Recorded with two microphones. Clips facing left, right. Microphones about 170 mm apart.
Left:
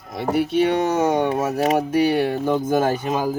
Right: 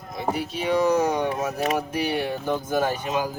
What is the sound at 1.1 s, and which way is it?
Speech, 50° left (ahead or behind).